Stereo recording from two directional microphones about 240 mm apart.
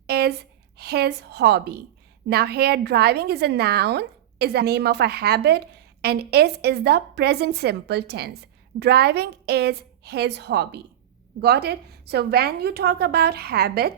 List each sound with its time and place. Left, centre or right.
0.1 s a woman's voice: right